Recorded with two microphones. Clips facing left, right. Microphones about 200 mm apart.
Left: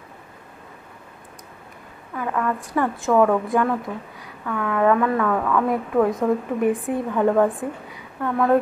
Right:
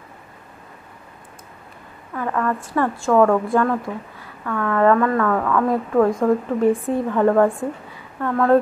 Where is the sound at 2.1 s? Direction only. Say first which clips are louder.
Right 2 dB; 10° left (ahead or behind).